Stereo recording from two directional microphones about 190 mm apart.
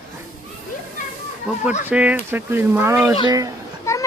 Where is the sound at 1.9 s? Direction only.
5° right (ahead or behind).